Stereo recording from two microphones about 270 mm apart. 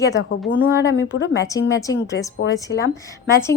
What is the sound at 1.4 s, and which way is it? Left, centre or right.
Speech, centre.